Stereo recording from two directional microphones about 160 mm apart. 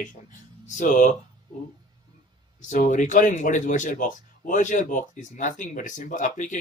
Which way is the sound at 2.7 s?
50° left (ahead or behind).